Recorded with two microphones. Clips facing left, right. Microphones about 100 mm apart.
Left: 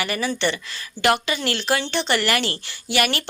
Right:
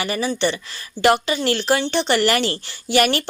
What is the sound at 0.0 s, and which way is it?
Speech, 25° right (ahead or behind).